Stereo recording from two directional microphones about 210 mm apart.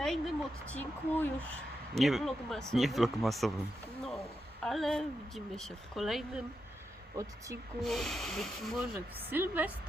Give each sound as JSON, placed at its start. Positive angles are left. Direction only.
{"t": 0.0, "sound": "speech", "side_deg": 0}
{"t": 4.6, "sound": "speech", "side_deg": 0}
{"t": 7.2, "sound": "speech", "side_deg": -15}
{"t": 7.8, "sound": "speech", "side_deg": 0}